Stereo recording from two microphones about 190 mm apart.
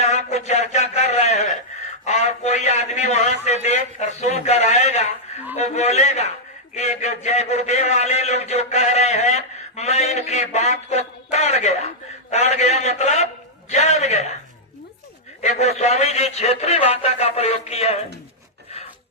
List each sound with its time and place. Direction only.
0.0 s a sound: 35° left (ahead or behind)
2.0 s a man's voice: 35° left (ahead or behind)
15.4 s a man's voice: 35° left (ahead or behind)